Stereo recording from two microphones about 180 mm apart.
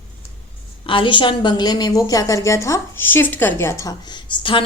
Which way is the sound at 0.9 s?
30° left (ahead or behind).